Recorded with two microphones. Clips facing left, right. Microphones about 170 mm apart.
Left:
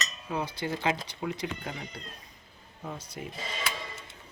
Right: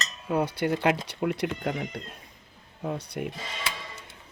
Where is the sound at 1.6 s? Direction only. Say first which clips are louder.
Right 8 dB; 55° right (ahead or behind).